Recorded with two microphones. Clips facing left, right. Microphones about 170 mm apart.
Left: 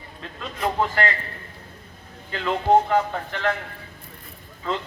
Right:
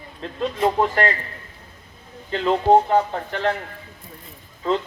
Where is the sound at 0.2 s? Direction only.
35° right (ahead or behind).